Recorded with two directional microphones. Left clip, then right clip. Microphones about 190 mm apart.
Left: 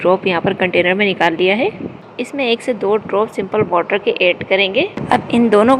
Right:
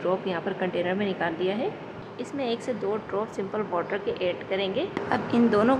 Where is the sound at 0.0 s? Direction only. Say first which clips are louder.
Left 13 dB; 30° left (ahead or behind).